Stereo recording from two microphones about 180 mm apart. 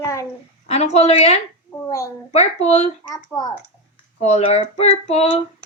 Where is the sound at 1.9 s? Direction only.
15° left (ahead or behind).